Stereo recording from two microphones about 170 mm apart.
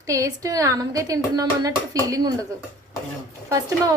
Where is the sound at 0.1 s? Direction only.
20° right (ahead or behind).